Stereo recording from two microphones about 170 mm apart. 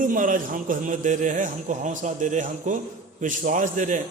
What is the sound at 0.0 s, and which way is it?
A man's voice, 50° right (ahead or behind).